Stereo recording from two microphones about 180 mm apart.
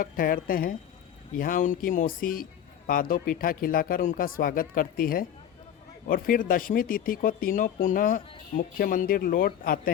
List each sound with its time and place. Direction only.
0.0 s speech: 50° left (ahead or behind)